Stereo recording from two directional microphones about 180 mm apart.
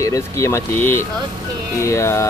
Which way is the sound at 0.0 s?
15° left (ahead or behind).